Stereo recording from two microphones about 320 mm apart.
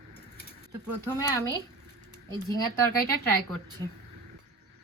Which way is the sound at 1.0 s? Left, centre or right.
Centre.